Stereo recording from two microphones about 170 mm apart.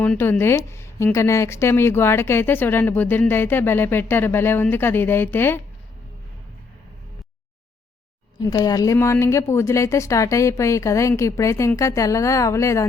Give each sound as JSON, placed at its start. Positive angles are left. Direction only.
{"t": 0.0, "sound": "speech", "side_deg": 10}
{"t": 8.4, "sound": "speech", "side_deg": 20}